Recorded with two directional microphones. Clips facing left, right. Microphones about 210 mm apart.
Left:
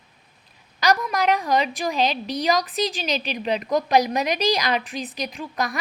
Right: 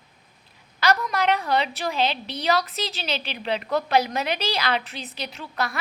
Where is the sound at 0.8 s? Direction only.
15° left (ahead or behind).